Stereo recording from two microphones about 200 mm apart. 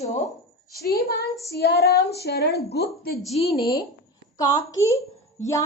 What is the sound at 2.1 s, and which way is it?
Speech, 55° left (ahead or behind).